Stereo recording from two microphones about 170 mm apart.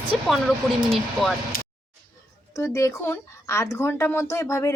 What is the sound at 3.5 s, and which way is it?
Speech, 15° left (ahead or behind).